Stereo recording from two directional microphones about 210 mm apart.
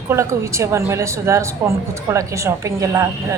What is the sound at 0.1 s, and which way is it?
Speech, 15° right (ahead or behind).